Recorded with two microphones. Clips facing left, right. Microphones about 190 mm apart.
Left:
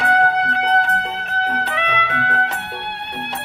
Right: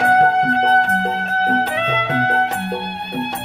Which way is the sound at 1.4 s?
40° right (ahead or behind).